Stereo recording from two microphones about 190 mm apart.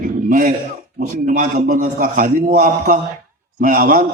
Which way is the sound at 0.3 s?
50° right (ahead or behind).